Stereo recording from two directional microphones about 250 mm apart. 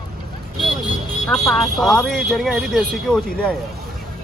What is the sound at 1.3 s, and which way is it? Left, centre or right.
Speech, centre.